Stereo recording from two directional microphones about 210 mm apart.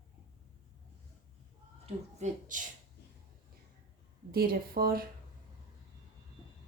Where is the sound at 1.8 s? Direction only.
35° right (ahead or behind).